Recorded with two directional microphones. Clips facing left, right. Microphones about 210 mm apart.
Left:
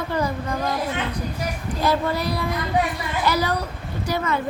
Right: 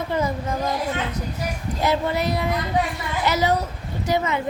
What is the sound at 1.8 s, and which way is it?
A woman's voice, 20° right (ahead or behind).